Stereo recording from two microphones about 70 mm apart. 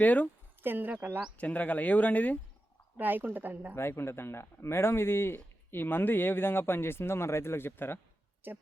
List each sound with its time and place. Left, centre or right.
0.0 s speech: left
0.6 s a woman's voice: right
1.4 s speech: left
3.0 s a woman's voice: right
3.8 s speech: left
8.4 s a woman's voice: right